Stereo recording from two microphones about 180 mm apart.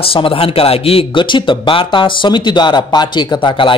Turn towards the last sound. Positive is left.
turn(degrees=30)  # may be behind; listen again after turning